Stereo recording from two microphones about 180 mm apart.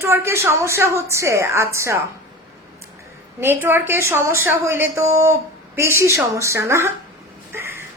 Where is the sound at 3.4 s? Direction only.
10° right (ahead or behind).